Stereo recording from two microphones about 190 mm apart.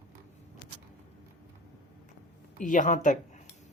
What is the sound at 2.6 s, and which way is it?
Speech, 40° left (ahead or behind).